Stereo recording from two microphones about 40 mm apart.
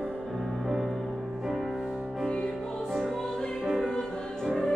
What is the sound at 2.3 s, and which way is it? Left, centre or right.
Music, centre.